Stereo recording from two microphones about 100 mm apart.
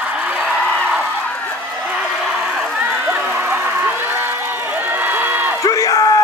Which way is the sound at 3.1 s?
20° right (ahead or behind).